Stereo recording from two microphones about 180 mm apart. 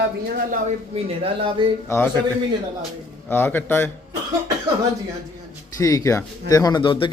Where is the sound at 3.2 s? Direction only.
10° left (ahead or behind).